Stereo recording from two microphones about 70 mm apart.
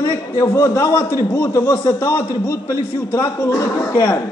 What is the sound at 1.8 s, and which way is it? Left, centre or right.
A man's voice, left.